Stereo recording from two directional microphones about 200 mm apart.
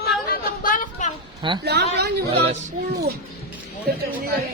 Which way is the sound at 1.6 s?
55° right (ahead or behind).